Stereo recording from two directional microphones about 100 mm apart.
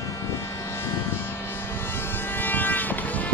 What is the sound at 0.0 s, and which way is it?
Vehicle, 25° left (ahead or behind).